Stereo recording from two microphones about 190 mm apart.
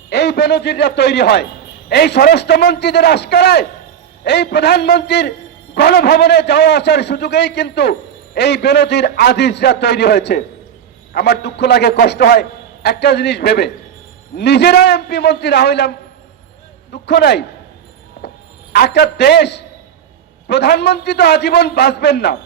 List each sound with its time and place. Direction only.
0.1 s a man's voice: 60° left (ahead or behind)
16.9 s a man's voice: 60° left (ahead or behind)
18.2 s a sound: 55° left (ahead or behind)
18.7 s a man's voice: 55° left (ahead or behind)